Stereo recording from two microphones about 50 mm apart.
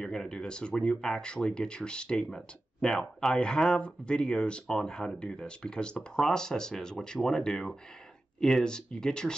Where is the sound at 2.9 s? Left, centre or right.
Centre.